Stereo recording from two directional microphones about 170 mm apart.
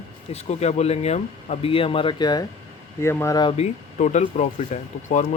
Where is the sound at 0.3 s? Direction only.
40° left (ahead or behind); by 3.5 s 20° left (ahead or behind).